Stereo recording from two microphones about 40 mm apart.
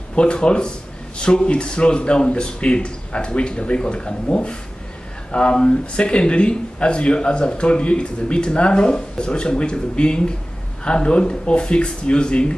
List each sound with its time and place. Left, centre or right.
0.1 s speech: left